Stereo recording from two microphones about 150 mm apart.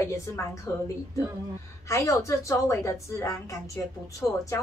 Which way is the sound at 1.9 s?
20° left (ahead or behind).